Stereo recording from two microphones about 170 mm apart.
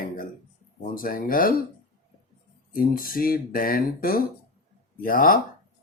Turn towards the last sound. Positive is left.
turn(degrees=55)  # may be behind; listen again after turning